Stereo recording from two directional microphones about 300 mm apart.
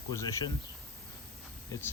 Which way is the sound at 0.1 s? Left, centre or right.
Centre.